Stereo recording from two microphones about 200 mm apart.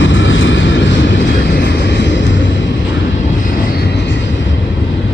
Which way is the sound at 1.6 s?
60° left (ahead or behind).